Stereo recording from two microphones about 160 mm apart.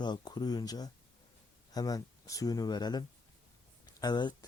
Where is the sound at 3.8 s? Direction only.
25° left (ahead or behind).